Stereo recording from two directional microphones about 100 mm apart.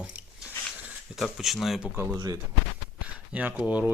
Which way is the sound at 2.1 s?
35° right (ahead or behind).